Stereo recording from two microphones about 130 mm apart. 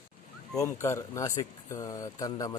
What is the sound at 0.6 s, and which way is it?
Speech, 25° left (ahead or behind).